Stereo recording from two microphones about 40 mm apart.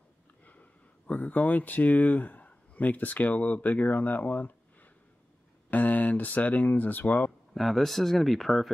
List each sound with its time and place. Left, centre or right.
0.5 s speech: left
5.7 s speech: left
7.5 s speech: centre